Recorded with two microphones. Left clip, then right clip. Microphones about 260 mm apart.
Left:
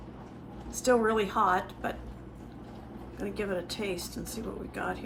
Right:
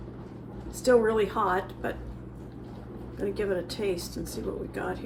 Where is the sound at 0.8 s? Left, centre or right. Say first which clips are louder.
Right 3 dB; left.